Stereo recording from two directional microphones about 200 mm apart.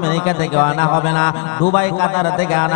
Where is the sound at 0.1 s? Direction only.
15° left (ahead or behind).